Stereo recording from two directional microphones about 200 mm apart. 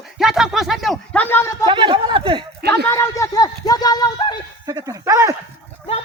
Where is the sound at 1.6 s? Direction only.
25° right (ahead or behind).